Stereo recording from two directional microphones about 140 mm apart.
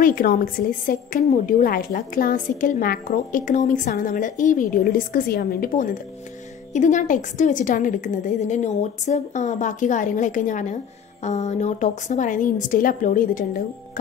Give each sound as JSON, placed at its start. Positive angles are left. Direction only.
{"t": 0.0, "sound": "a woman's voice", "side_deg": 80}
{"t": 6.7, "sound": "a woman's voice", "side_deg": 60}